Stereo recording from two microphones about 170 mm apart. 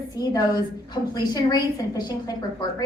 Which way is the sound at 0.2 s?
25° left (ahead or behind).